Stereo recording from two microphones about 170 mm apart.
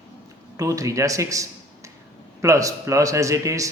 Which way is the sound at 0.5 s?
20° right (ahead or behind).